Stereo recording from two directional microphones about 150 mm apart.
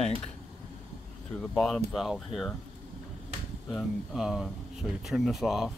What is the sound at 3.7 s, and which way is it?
Speech, centre (ahead or behind).